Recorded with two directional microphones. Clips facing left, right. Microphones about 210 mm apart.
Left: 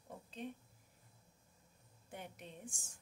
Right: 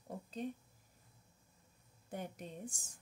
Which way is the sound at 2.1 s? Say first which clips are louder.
Right 6 dB; 40° right (ahead or behind).